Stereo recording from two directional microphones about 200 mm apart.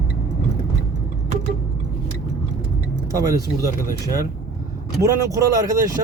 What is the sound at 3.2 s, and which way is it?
Speech, 15° right (ahead or behind).